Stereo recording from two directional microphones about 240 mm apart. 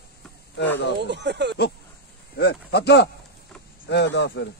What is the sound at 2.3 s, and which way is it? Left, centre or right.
Speech, left.